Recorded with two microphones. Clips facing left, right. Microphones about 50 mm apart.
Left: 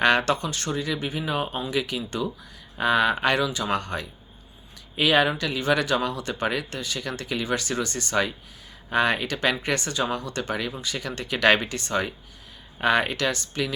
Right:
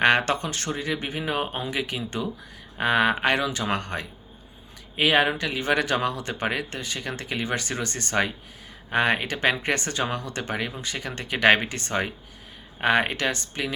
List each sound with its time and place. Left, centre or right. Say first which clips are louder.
0.0 s speech: even; right